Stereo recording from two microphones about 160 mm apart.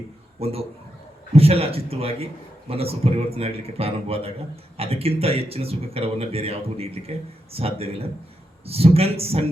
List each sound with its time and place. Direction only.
0.3 s a man's voice: 40° right (ahead or behind)